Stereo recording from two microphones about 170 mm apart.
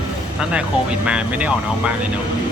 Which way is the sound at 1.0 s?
10° right (ahead or behind).